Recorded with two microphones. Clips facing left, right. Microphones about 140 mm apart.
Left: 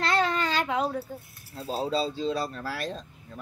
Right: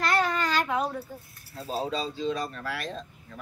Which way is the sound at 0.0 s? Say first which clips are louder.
Even; 25° left (ahead or behind).